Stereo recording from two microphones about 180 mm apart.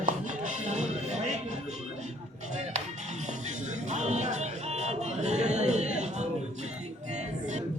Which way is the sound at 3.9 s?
40° right (ahead or behind).